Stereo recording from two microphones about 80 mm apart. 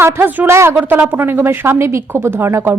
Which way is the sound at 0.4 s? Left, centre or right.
Right.